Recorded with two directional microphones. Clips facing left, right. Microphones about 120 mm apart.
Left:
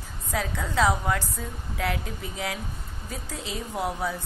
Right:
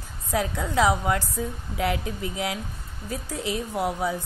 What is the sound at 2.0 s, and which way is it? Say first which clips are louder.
Speech: right 5 dB; 80° right.